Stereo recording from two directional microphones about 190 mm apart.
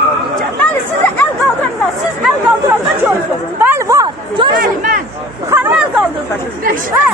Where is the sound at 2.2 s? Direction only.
10° right (ahead or behind).